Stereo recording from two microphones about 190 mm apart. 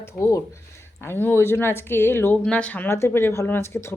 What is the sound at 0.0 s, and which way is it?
A woman's voice, 15° left (ahead or behind).